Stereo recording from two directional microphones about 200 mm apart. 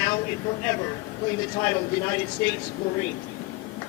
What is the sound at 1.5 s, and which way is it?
Speech, 20° left (ahead or behind).